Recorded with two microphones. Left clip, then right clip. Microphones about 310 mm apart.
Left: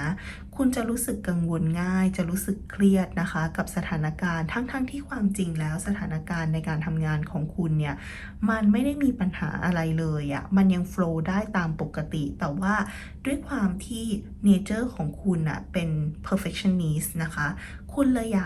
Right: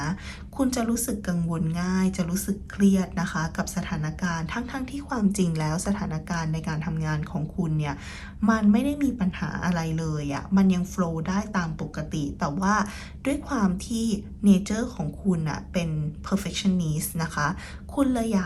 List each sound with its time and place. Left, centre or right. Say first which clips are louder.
0.0 s a woman's voice: even; centre